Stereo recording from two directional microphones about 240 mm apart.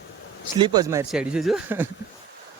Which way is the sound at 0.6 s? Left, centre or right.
Centre.